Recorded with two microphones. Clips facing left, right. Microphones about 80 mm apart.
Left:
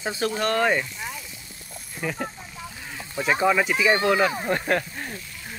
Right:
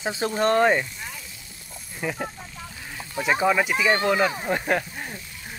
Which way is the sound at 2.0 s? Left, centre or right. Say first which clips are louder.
Even; centre.